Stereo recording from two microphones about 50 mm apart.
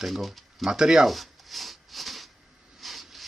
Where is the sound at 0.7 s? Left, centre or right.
Centre.